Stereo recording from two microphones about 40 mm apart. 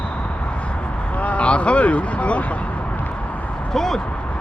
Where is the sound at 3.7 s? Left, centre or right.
Centre.